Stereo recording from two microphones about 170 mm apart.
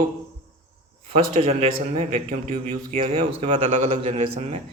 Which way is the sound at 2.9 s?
35° right (ahead or behind).